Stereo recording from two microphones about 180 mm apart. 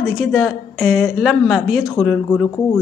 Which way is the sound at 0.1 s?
Centre (ahead or behind).